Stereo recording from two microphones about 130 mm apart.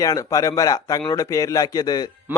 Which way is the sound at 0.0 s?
25° left (ahead or behind).